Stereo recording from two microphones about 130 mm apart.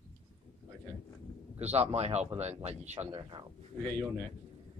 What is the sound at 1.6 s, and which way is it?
Speech, 55° right (ahead or behind).